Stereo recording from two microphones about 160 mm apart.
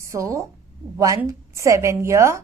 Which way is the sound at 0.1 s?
20° right (ahead or behind).